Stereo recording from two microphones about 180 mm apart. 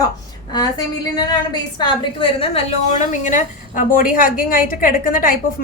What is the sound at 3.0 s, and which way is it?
A woman's voice, 45° left (ahead or behind).